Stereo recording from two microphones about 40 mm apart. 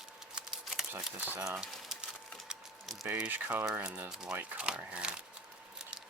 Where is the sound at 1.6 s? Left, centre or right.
Centre.